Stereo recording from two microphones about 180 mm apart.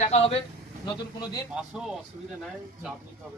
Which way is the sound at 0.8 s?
25° left (ahead or behind).